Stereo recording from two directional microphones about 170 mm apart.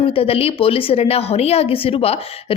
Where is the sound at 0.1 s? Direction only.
35° left (ahead or behind).